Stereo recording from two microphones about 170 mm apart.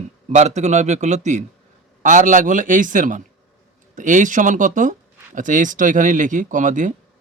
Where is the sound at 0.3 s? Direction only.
45° right (ahead or behind).